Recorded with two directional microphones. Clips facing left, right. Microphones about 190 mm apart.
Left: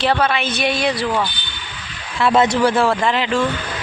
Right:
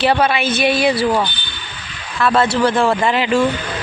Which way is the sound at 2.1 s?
20° left (ahead or behind).